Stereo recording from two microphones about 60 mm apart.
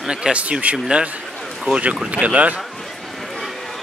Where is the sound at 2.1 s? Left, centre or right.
Right.